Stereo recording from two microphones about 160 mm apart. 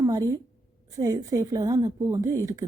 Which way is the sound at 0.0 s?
20° right (ahead or behind).